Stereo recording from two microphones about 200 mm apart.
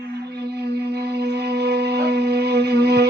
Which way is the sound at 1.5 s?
55° right (ahead or behind).